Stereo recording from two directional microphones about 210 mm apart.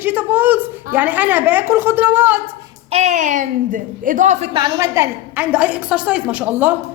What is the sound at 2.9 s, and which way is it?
Speech, 35° right (ahead or behind).